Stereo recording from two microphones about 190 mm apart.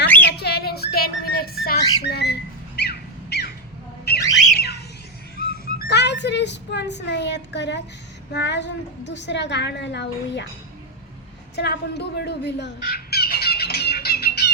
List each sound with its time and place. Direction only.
0.3 s music: 55° left (ahead or behind)
2.0 s a sound: 60° left (ahead or behind)
4.5 s squawk: 55° left (ahead or behind)
5.4 s a sound: 50° left (ahead or behind)
8.3 s a woman's voice: 65° left (ahead or behind)
11.5 s fowl: 65° left (ahead or behind)